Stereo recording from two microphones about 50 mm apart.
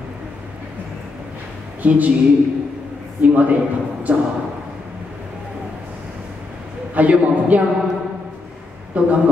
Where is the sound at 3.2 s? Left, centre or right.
Right.